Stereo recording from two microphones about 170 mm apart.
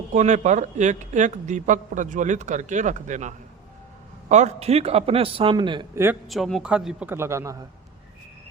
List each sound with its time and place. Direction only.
0.1 s a man's voice: 45° right (ahead or behind); by 5.8 s 30° right (ahead or behind)
5.9 s a man's voice: 15° right (ahead or behind)
6.2 s a man's voice: centre (ahead or behind); by 7.5 s 15° right (ahead or behind)